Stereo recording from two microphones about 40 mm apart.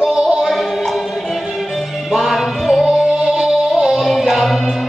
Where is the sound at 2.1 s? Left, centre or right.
Centre.